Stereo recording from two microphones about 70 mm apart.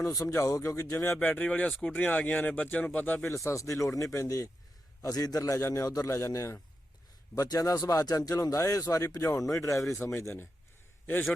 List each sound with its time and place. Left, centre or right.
0.0 s speech: left
1.2 s speech: centre
3.2 s speech: left
7.3 s speech: left
9.1 s speech: left
9.5 s speech: left
9.9 s a man's voice: left